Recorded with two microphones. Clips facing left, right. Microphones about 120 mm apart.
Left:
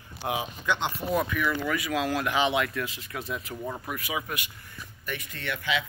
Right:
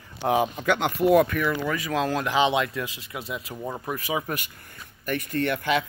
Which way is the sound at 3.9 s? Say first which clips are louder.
Right 4 dB; 30° right (ahead or behind).